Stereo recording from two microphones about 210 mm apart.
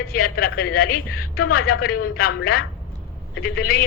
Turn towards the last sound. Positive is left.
turn(degrees=45)  # may be behind; listen again after turning